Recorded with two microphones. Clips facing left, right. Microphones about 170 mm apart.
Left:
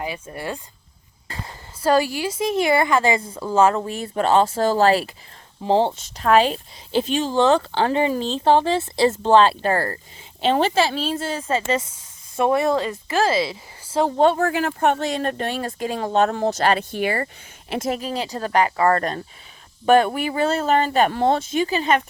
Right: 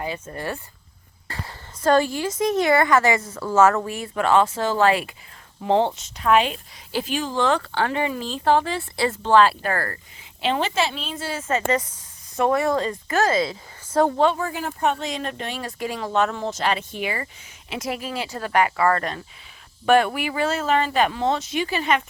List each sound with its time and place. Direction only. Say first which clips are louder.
0.0 s speech: even; 15° left (ahead or behind)
1.8 s speech: even; 10° left (ahead or behind)
2.3 s speech: even; 25° left (ahead or behind)
3.2 s speech: even; 15° left (ahead or behind)
3.7 s speech: even; 25° left (ahead or behind)
12.4 s speech: left 1 dB; 15° left (ahead or behind)
13.1 s speech: left 1 dB; 30° left (ahead or behind)
14.3 s speech: left 7 dB; 75° left (ahead or behind)
14.7 s speech: left 4 dB; 60° left (ahead or behind)
16.0 s speech: left 3 dB; 30° left (ahead or behind)
16.3 s speech: left 5 dB; 45° left (ahead or behind)
16.7 s speech: left 5 dB; 55° left (ahead or behind); by 22.0 s 40° left (ahead or behind)